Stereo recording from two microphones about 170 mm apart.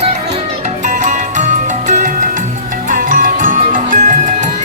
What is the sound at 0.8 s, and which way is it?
Music, 45° right (ahead or behind).